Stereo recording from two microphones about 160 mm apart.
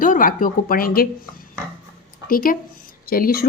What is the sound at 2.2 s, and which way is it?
Speech, 65° left (ahead or behind).